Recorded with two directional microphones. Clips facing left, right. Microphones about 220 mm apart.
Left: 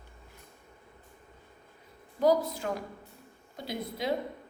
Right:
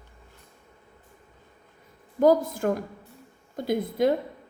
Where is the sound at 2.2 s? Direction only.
50° right (ahead or behind).